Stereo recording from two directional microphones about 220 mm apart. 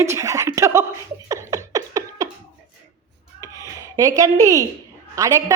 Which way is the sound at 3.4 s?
15° right (ahead or behind).